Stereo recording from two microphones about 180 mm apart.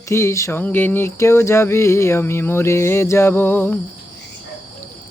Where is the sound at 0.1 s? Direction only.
15° left (ahead or behind).